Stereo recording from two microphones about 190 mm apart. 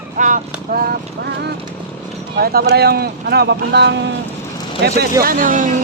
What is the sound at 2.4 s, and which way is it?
Speech, 55° right (ahead or behind).